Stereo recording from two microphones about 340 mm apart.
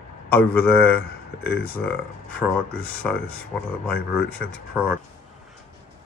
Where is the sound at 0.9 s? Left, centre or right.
Left.